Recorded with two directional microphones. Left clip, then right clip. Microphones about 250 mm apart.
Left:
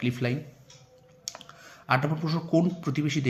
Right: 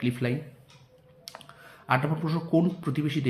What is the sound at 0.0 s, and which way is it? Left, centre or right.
Speech, centre.